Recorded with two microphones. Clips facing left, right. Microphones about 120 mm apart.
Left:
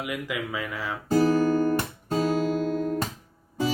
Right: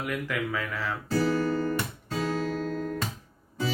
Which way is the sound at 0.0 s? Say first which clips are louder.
Even; 15° left (ahead or behind).